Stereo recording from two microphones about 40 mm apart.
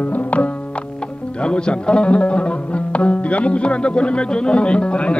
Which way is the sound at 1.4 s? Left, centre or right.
Left.